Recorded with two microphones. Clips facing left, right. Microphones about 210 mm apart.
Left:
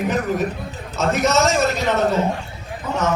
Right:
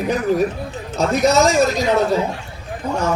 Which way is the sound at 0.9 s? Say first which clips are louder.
Right 3 dB; 35° right (ahead or behind).